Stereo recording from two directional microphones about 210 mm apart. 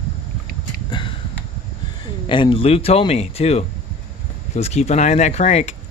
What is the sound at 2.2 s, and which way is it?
Speech, 25° left (ahead or behind).